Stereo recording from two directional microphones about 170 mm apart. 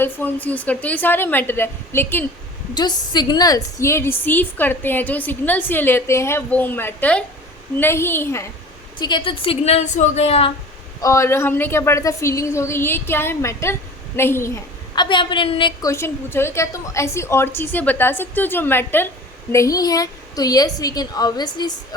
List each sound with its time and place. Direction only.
0.0 s a woman's voice: 10° left (ahead or behind)
2.7 s a woman's voice: 25° left (ahead or behind)
9.0 s a woman's voice: 25° left (ahead or behind)
11.0 s a woman's voice: 15° left (ahead or behind)
15.0 s a woman's voice: 30° left (ahead or behind)
15.9 s a woman's voice: 15° left (ahead or behind)